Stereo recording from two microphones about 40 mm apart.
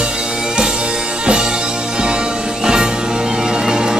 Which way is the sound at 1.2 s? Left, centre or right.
Right.